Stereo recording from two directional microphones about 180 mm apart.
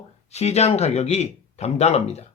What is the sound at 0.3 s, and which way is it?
Speech, 35° left (ahead or behind).